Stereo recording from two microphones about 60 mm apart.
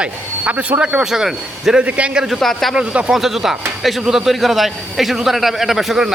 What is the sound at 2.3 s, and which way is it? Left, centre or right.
Speech, centre.